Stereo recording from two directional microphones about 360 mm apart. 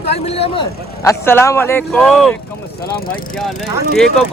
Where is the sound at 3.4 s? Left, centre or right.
Centre.